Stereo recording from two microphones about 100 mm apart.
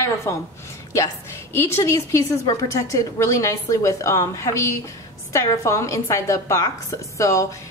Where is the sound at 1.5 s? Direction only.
25° left (ahead or behind).